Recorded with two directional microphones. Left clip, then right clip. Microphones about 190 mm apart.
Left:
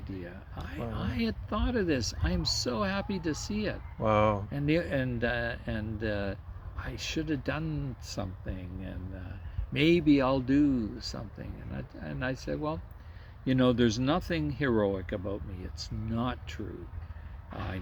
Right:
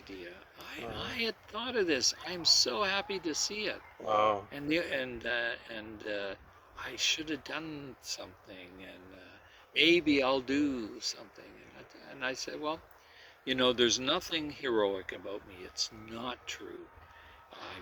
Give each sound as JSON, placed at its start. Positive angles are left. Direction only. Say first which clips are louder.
{"t": 0.1, "sound": "speech", "louder": "left 3 dB", "side_deg": 20}
{"t": 4.0, "sound": "speech", "louder": "left 2 dB", "side_deg": -5}
{"t": 4.5, "sound": "speech", "louder": "left 3 dB", "side_deg": 25}